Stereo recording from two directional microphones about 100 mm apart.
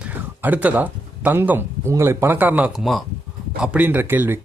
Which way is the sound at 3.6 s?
15° right (ahead or behind).